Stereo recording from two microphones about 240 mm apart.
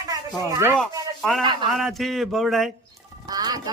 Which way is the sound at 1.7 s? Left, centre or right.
Centre.